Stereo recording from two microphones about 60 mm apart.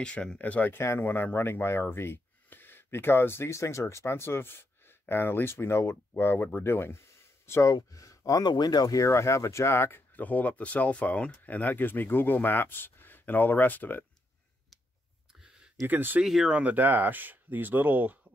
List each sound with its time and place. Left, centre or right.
0.0 s speech: centre
0.7 s speech: left
7.6 s speech: left
9.1 s speech: left
15.9 s speech: right
16.3 s speech: centre
16.5 s speech: right